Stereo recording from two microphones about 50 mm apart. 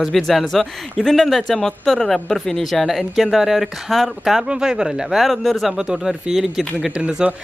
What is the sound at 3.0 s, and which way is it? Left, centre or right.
Speech, centre.